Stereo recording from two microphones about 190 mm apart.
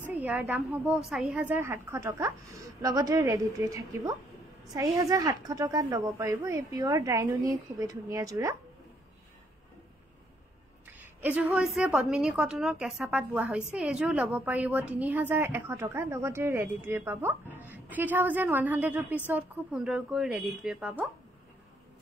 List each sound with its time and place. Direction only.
0.1 s a woman's voice: 10° right (ahead or behind)
10.9 s a woman's voice: 10° right (ahead or behind)